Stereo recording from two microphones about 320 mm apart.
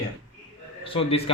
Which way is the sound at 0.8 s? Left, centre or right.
Centre.